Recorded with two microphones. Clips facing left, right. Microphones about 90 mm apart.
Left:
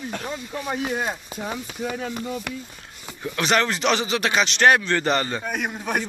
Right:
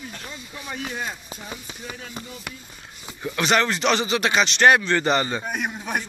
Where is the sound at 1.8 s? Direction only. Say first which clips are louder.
Left 9 dB; 90° left.